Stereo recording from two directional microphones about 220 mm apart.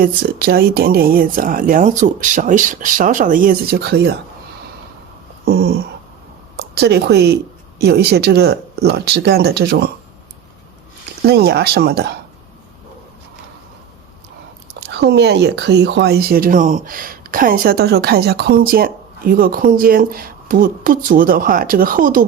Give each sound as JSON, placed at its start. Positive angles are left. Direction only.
{"t": 0.0, "sound": "speech", "side_deg": -40}
{"t": 5.5, "sound": "a sound", "side_deg": -45}
{"t": 6.6, "sound": "speech", "side_deg": -50}
{"t": 11.3, "sound": "speech", "side_deg": -45}
{"t": 14.8, "sound": "speech", "side_deg": -50}